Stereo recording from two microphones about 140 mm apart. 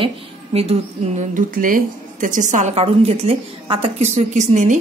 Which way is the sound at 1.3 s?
80° right.